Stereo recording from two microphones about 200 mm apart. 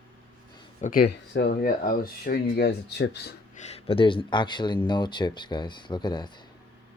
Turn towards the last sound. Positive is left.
turn(degrees=20)  # may be behind; listen again after turning